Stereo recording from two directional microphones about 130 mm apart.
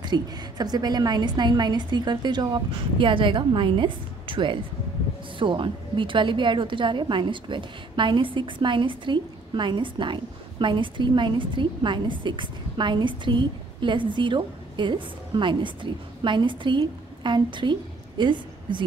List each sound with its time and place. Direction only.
0.0 s a woman's voice: 35° right (ahead or behind)